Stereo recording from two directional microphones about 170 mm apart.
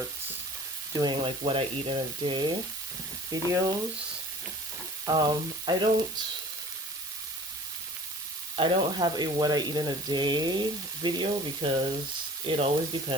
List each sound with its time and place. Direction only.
0.9 s speech: 25° right (ahead or behind)
5.0 s speech: 25° right (ahead or behind)
8.5 s speech: 30° right (ahead or behind)